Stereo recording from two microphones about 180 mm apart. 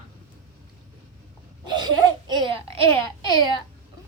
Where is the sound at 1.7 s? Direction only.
25° right (ahead or behind).